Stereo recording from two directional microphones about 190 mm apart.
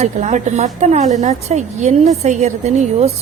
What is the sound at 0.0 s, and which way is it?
A woman's voice, 35° right (ahead or behind).